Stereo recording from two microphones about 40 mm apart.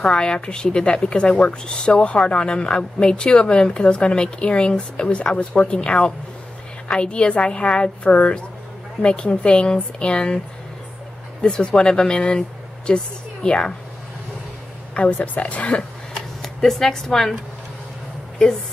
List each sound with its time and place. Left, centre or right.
0.0 s a woman's voice: left
11.4 s speech: left
15.0 s speech: left
16.4 s a woman's voice: centre